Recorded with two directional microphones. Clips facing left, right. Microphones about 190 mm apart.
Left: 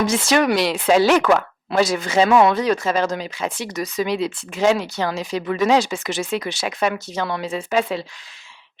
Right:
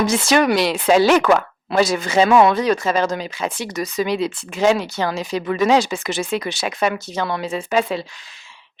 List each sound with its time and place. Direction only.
0.0 s speech: 5° right (ahead or behind)
1.2 s speech: 20° right (ahead or behind)
1.7 s speech: 5° right (ahead or behind)